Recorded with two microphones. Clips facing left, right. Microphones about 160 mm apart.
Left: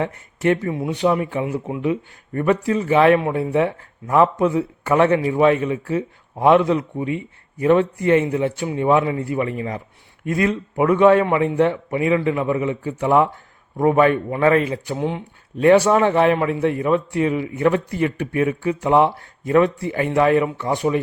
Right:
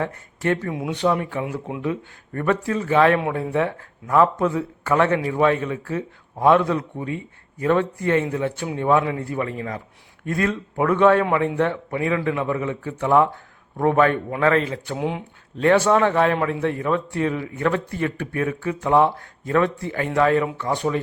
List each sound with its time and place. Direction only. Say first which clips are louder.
0.0 s a man's voice: left 4 dB; 15° left (ahead or behind)
1.8 s a man's voice: left 4 dB; 15° left (ahead or behind)
8.6 s a man's voice: left 1 dB; 5° left (ahead or behind)
14.9 s a man's voice: left 1 dB; 5° right (ahead or behind)
15.5 s a man's voice: left 3 dB; 15° left (ahead or behind)